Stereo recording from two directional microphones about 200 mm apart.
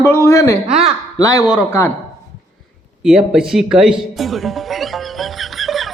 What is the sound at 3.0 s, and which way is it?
Music, centre (ahead or behind).